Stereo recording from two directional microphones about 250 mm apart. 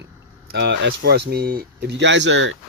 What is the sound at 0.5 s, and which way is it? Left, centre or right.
Speech, right.